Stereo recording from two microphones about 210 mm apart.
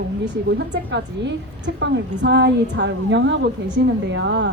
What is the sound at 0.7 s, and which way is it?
A woman's voice, 55° right (ahead or behind).